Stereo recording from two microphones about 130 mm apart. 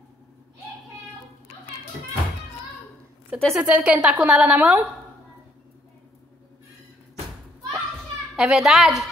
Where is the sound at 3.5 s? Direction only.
10° right (ahead or behind).